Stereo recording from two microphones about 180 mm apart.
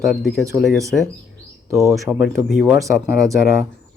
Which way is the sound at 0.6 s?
Centre (ahead or behind).